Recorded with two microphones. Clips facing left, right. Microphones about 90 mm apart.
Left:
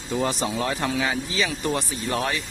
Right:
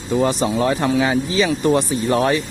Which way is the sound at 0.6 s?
40° right (ahead or behind).